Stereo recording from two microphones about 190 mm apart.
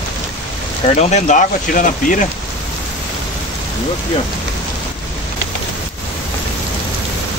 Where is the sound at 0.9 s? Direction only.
40° left (ahead or behind).